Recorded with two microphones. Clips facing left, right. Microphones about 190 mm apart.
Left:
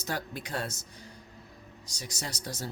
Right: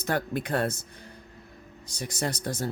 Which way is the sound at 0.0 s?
55° right (ahead or behind).